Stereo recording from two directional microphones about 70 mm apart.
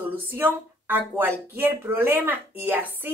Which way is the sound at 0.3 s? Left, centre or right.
Right.